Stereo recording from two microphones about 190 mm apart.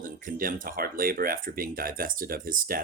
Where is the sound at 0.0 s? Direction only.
45° right (ahead or behind).